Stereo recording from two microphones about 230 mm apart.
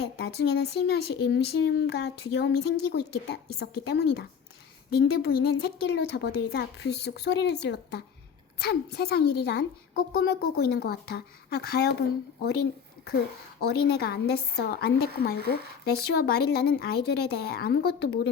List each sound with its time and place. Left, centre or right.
0.0 s speech: left
14.0 s speech: left